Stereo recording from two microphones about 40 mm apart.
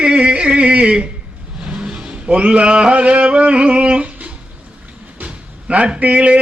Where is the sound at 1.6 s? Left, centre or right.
Right.